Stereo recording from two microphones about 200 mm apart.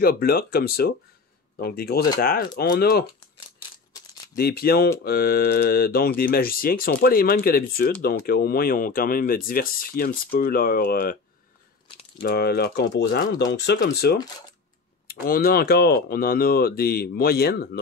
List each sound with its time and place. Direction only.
0.0 s speech: 50° left (ahead or behind)
4.4 s speech: 50° left (ahead or behind)
12.2 s speech: 50° left (ahead or behind)
13.7 s speech: 45° left (ahead or behind)